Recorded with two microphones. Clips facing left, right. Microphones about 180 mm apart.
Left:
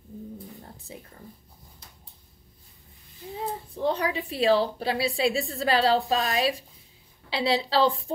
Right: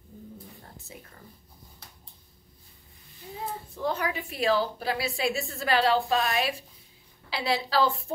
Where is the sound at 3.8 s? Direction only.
30° left (ahead or behind).